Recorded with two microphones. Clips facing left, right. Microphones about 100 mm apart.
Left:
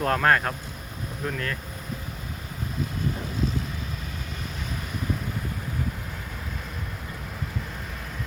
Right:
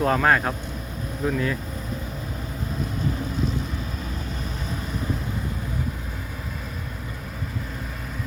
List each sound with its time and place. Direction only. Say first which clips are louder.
0.0 s speech: right 2 dB; 5° right (ahead or behind)